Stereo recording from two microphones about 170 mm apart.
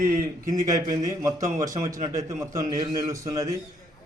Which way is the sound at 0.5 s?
20° right (ahead or behind).